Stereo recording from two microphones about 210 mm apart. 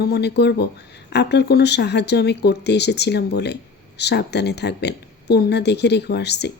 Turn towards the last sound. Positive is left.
turn(degrees=50)  # may be behind; listen again after turning